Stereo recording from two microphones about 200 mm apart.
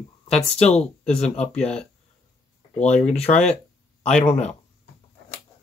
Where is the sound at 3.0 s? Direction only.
30° left (ahead or behind).